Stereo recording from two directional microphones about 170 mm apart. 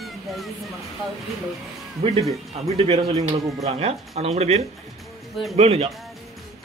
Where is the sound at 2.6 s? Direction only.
35° right (ahead or behind).